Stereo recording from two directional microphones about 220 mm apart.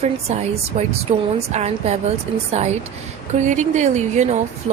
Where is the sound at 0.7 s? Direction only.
30° right (ahead or behind).